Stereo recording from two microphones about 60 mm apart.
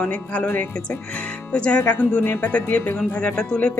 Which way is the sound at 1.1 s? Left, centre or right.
Left.